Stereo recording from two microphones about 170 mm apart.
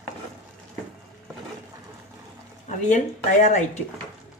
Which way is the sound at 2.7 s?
45° left (ahead or behind).